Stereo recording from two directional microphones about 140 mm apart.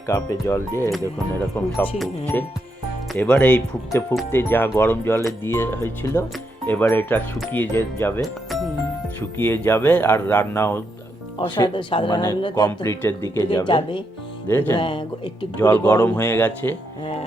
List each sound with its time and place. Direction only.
0.1 s speech: 20° left (ahead or behind)
3.2 s speech: 10° left (ahead or behind)
8.2 s speech: centre (ahead or behind)
9.4 s speech: 15° left (ahead or behind)
11.3 s speech: 35° left (ahead or behind)
12.8 s speech: 20° left (ahead or behind)
13.5 s speech: 35° left (ahead or behind)
14.4 s music: 15° left (ahead or behind)
14.7 s speech: 35° left (ahead or behind)
15.5 s speech: 10° left (ahead or behind)